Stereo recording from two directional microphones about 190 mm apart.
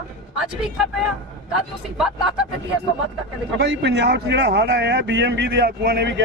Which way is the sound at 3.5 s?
65° right (ahead or behind).